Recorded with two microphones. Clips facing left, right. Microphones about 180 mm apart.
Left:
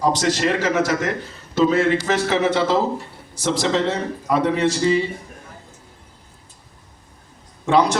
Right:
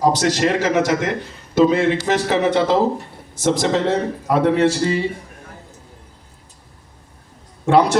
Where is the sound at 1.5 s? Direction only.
15° right (ahead or behind).